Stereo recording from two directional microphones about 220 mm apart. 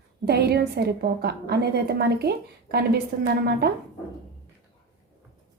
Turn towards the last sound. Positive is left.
turn(degrees=-50)  # may be behind; listen again after turning